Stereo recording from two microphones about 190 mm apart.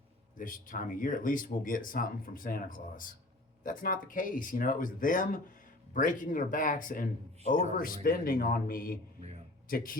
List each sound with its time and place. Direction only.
0.3 s speech: 45° left (ahead or behind)